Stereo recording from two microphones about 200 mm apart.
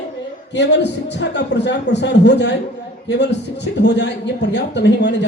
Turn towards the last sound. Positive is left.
turn(degrees=60)  # may be behind; listen again after turning